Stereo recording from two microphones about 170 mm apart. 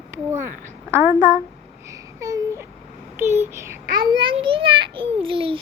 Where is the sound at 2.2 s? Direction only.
20° right (ahead or behind).